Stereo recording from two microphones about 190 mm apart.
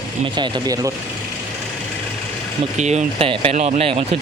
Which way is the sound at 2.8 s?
35° right (ahead or behind).